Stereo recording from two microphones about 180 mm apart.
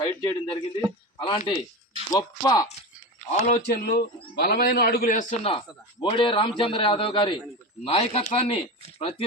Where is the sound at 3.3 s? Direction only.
40° left (ahead or behind).